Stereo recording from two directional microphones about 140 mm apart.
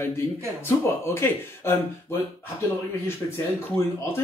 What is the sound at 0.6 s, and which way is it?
Speech, 20° left (ahead or behind).